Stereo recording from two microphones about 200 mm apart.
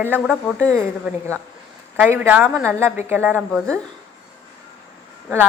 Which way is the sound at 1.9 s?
10° right (ahead or behind).